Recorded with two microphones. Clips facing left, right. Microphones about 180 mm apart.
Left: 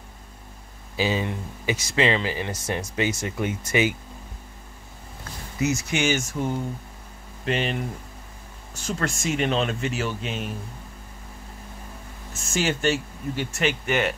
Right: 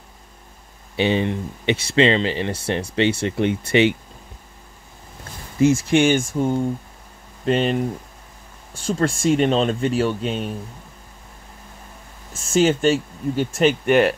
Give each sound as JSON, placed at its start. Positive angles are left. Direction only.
{"t": 1.0, "sound": "speech", "side_deg": -30}
{"t": 5.6, "sound": "speech", "side_deg": -30}
{"t": 5.9, "sound": "speech", "side_deg": -55}
{"t": 6.4, "sound": "speech", "side_deg": -30}
{"t": 12.4, "sound": "speech", "side_deg": -30}
{"t": 13.8, "sound": "speech", "side_deg": -60}